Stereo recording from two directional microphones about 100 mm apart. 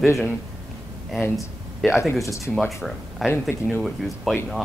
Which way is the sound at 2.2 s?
30° left (ahead or behind).